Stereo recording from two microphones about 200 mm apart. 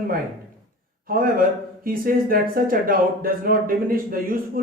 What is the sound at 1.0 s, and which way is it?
Speech, 45° right (ahead or behind).